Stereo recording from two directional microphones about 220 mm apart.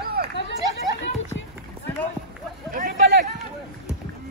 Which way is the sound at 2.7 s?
35° right (ahead or behind).